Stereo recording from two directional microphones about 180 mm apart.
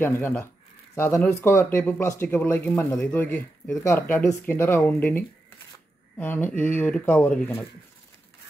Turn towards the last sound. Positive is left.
turn(degrees=10)  # may be behind; listen again after turning